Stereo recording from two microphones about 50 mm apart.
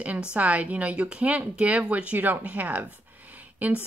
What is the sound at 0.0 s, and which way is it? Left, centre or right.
Speech, right.